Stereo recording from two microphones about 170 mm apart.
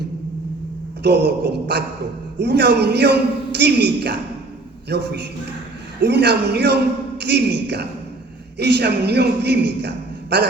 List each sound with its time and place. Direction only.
1.0 s a man's voice: 85° right